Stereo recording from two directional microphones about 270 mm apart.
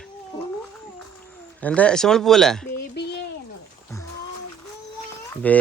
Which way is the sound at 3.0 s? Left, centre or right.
Left.